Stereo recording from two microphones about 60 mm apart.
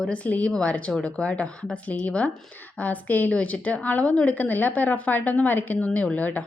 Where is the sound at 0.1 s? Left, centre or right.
Left.